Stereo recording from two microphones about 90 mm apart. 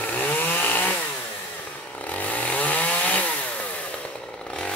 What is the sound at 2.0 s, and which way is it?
Chainsaw, 15° left (ahead or behind).